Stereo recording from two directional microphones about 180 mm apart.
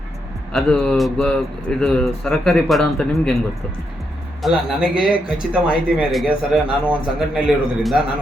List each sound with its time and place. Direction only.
0.5 s speech: 5° left (ahead or behind)
4.4 s speech: 5° right (ahead or behind)